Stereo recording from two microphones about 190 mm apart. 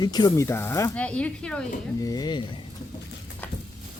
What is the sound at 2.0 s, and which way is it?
Speech, 20° left (ahead or behind).